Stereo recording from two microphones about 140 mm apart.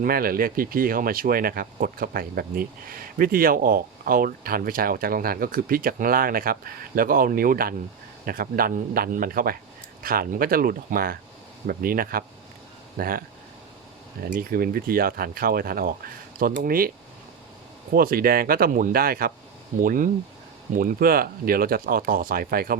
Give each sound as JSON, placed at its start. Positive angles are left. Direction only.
{"t": 0.0, "sound": "speech", "side_deg": -90}
{"t": 14.3, "sound": "speech", "side_deg": -90}
{"t": 17.9, "sound": "speech", "side_deg": -90}